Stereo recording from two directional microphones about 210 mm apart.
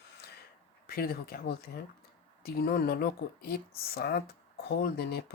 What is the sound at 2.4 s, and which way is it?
Speech, 45° left (ahead or behind).